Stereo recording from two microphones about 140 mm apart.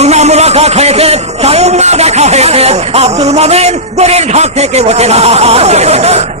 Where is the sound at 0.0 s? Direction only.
50° right (ahead or behind).